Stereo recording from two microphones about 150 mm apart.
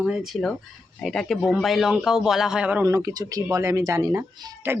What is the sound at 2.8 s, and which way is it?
Speech, 20° right (ahead or behind).